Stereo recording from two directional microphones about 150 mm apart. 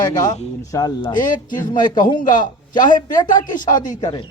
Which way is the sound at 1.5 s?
60° left (ahead or behind).